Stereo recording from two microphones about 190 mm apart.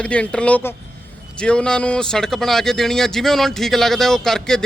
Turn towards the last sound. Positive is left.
turn(degrees=5)  # may be behind; listen again after turning